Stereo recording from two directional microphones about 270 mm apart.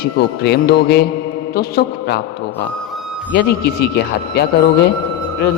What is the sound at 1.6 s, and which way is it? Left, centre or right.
Mantra, left.